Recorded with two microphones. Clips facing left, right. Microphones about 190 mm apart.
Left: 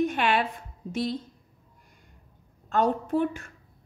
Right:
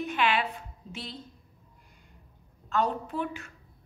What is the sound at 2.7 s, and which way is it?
Speech, 50° left (ahead or behind).